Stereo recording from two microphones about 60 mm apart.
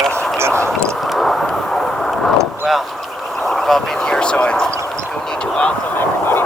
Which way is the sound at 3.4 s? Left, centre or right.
Centre.